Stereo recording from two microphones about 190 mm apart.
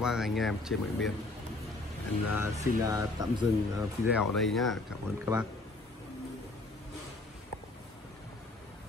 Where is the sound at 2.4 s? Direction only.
15° right (ahead or behind).